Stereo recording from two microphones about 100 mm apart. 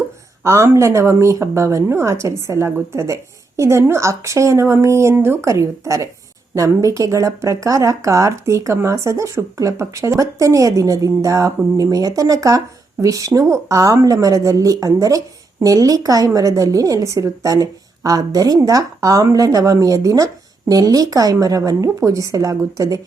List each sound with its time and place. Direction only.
0.4 s speech: 25° right (ahead or behind)